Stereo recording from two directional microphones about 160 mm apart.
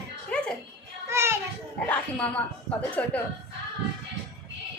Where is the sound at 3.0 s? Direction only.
10° left (ahead or behind).